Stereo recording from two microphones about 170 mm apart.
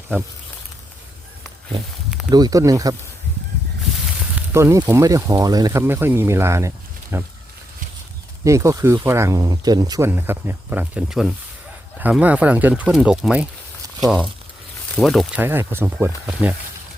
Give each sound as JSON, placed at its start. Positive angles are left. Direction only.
{"t": 2.3, "sound": "speech", "side_deg": -20}
{"t": 4.4, "sound": "speech", "side_deg": -15}
{"t": 8.4, "sound": "speech", "side_deg": -20}
{"t": 15.4, "sound": "speech", "side_deg": -15}